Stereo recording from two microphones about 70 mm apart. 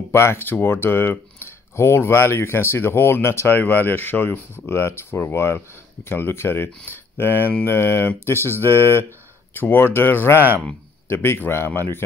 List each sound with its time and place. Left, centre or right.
0.1 s speech: left